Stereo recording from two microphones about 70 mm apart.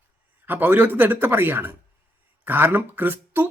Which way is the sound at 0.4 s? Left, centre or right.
Right.